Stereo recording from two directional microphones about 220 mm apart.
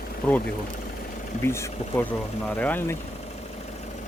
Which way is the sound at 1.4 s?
10° left (ahead or behind).